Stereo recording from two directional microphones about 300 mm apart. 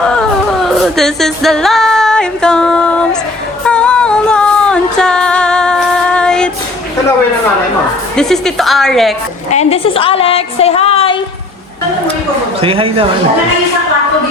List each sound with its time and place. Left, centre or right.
0.2 s a sound: centre
3.7 s music: centre
8.1 s a woman's voice: centre
9.5 s a woman's voice: left
12.6 s a man's voice: centre